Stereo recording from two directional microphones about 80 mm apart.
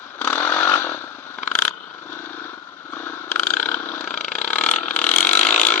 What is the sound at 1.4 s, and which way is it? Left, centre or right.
Purr, centre.